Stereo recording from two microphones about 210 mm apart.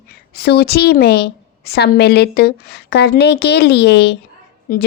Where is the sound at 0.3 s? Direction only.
50° left (ahead or behind).